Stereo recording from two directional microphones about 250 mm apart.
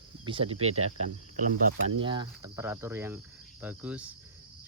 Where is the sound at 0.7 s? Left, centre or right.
Right.